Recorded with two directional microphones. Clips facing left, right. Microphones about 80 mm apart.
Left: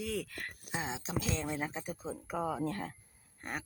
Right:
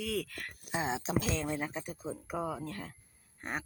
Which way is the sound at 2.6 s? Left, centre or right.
Left.